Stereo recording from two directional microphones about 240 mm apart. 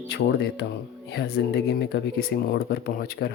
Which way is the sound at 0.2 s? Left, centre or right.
Left.